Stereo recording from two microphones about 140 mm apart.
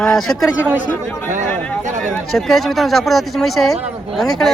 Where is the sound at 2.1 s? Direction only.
Centre (ahead or behind).